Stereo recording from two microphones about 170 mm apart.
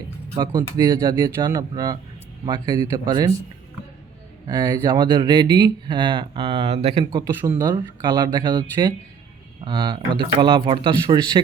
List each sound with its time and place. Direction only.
0.3 s speech: 25° right (ahead or behind)
4.4 s speech: 25° right (ahead or behind)